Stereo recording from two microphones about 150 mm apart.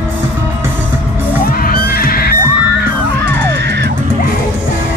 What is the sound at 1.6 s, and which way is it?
Heart sounds, 80° left.